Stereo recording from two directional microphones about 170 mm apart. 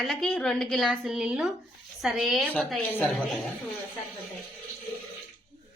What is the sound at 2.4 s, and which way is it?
Speech, 10° left (ahead or behind).